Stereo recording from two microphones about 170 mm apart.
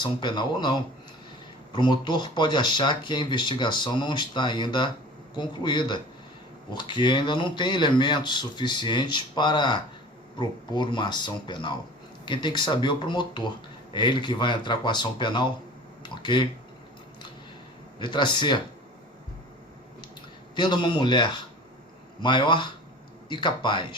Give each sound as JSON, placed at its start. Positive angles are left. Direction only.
{"t": 0.0, "sound": "speech", "side_deg": 25}
{"t": 18.0, "sound": "speech", "side_deg": 25}
{"t": 20.6, "sound": "speech", "side_deg": 25}